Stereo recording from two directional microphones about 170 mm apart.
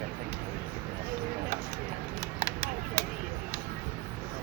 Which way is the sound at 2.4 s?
40° right (ahead or behind).